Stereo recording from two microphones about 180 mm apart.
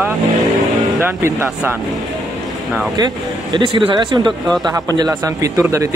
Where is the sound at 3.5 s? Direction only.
25° right (ahead or behind).